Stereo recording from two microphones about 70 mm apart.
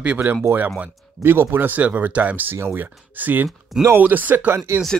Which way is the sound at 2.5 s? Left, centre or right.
Right.